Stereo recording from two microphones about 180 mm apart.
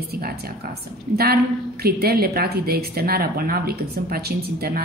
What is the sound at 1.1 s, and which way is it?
A woman's voice, 60° right (ahead or behind).